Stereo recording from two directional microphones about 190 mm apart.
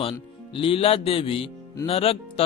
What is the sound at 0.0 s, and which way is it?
Speech, 30° left (ahead or behind).